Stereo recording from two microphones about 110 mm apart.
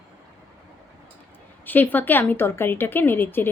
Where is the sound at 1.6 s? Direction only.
15° left (ahead or behind).